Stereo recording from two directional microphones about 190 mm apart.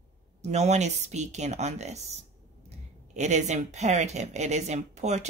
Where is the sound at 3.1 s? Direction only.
35° right (ahead or behind).